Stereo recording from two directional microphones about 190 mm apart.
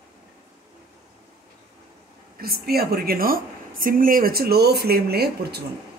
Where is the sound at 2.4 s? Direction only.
50° right (ahead or behind).